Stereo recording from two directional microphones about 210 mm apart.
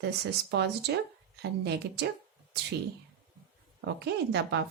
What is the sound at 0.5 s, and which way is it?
A woman's voice, 55° right (ahead or behind).